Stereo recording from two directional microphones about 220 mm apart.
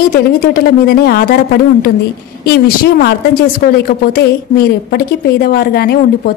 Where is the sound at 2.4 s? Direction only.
45° left (ahead or behind).